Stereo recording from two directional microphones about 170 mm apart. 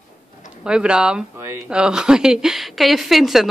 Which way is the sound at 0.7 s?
5° right (ahead or behind).